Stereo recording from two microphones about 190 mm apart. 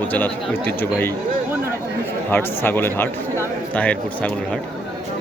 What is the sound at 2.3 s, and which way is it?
Speech, 10° left (ahead or behind).